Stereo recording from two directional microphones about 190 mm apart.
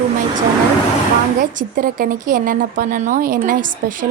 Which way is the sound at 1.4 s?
45° right (ahead or behind).